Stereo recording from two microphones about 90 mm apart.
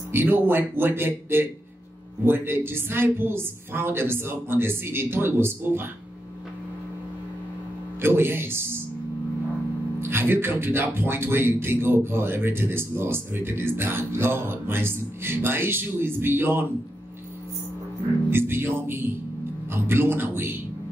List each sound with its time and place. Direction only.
0.1 s speech: 20° right (ahead or behind)
8.0 s speech: 25° right (ahead or behind)
9.9 s speech: 25° right (ahead or behind)
18.3 s speech: 25° right (ahead or behind)